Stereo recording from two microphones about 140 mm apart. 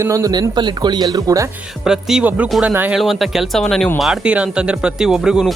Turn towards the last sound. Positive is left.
turn(degrees=-5)  # may be behind; listen again after turning